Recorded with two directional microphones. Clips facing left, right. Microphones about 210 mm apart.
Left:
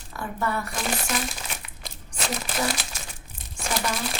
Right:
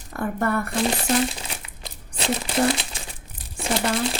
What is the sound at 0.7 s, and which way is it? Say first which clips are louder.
Speech: right 7 dB; 30° right (ahead or behind).